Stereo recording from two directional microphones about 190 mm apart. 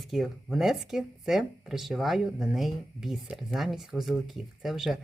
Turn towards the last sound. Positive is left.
turn(degrees=0)  # may be behind; listen again after turning